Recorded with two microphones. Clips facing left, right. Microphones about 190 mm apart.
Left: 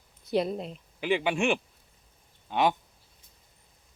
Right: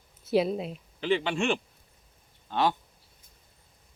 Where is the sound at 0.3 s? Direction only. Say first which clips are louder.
Right 2 dB; 5° right (ahead or behind).